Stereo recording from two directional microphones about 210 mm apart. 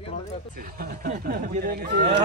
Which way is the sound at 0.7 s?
40° right (ahead or behind).